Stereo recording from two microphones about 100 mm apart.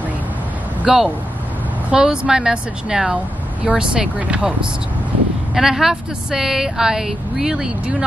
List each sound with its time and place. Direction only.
0.8 s a woman's voice: 10° right (ahead or behind)